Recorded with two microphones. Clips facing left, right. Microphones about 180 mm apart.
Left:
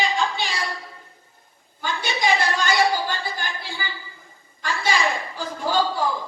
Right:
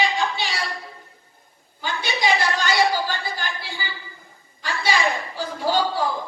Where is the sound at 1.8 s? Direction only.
50° left (ahead or behind).